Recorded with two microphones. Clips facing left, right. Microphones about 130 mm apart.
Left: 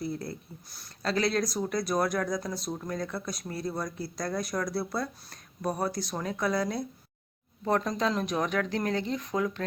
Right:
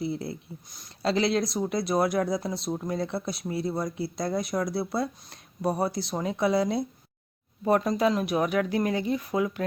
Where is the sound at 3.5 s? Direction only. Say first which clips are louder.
Right 5 dB; 5° right (ahead or behind).